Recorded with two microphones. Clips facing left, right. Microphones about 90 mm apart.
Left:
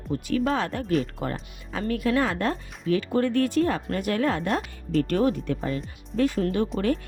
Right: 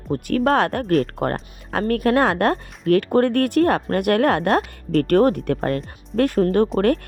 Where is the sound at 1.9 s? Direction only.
60° right (ahead or behind).